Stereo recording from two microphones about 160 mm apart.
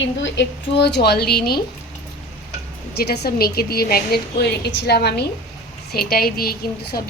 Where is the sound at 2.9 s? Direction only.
85° left.